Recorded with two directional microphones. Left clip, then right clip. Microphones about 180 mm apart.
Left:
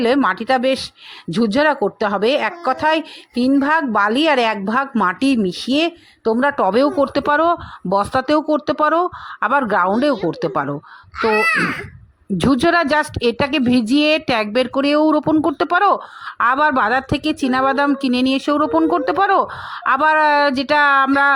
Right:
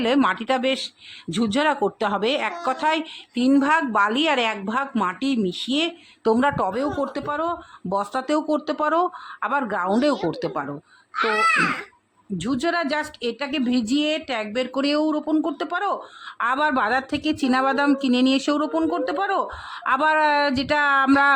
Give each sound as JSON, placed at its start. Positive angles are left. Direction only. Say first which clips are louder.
{"t": 0.0, "sound": "a woman's voice", "louder": "left 4 dB", "side_deg": 25}
{"t": 6.7, "sound": "a woman's voice", "louder": "left 9 dB", "side_deg": 35}
{"t": 11.2, "sound": "a woman's voice", "louder": "left 3 dB", "side_deg": 40}
{"t": 18.9, "sound": "a woman's voice", "louder": "left 8 dB", "side_deg": 30}